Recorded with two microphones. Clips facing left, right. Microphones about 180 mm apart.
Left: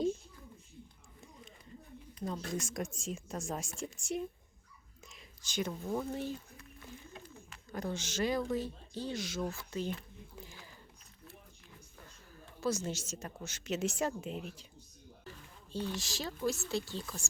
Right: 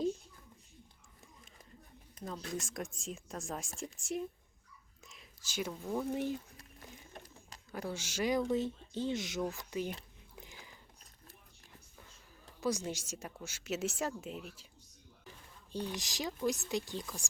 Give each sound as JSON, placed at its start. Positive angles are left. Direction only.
{"t": 2.3, "sound": "a woman's voice", "side_deg": 0}
{"t": 5.0, "sound": "whispering", "side_deg": -5}
{"t": 6.1, "sound": "speech", "side_deg": -15}
{"t": 6.6, "sound": "a sound", "side_deg": -35}
{"t": 7.7, "sound": "speech", "side_deg": -10}
{"t": 10.4, "sound": "a sound", "side_deg": -20}
{"t": 12.5, "sound": "a woman's voice", "side_deg": -15}
{"t": 15.2, "sound": "speech", "side_deg": -15}